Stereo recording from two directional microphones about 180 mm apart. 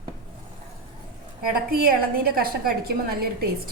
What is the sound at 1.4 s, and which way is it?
A woman's voice, 55° right (ahead or behind).